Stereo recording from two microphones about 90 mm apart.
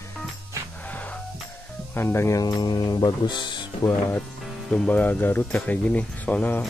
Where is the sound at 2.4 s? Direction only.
50° left (ahead or behind).